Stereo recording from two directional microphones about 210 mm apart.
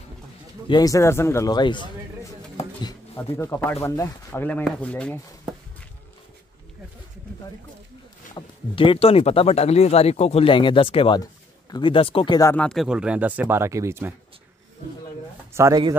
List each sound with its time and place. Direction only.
0.7 s speech: 15° left (ahead or behind)
8.4 s speech: 25° left (ahead or behind); by 14.1 s 10° right (ahead or behind)
15.5 s speech: 15° right (ahead or behind)